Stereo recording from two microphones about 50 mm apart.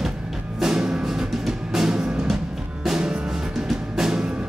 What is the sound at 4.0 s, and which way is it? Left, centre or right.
Music, centre.